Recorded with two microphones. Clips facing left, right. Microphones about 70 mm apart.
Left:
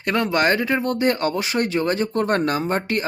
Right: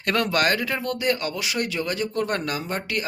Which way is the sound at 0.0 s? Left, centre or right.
Left.